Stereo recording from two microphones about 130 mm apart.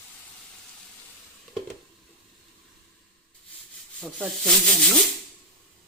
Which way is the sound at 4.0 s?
5° left (ahead or behind).